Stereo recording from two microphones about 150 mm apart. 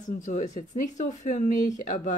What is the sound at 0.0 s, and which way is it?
Speech, 55° left (ahead or behind).